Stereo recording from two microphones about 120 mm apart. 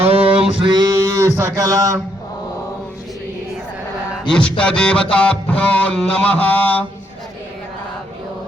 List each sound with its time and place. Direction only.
0.0 s male singing: 55° right (ahead or behind)
0.6 s a sound: 40° right (ahead or behind)
4.3 s music: 10° left (ahead or behind)